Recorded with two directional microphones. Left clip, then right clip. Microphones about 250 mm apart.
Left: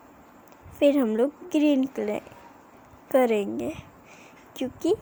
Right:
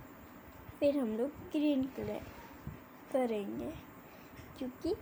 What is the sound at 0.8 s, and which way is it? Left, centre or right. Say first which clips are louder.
A woman's voice: left 11 dB; left.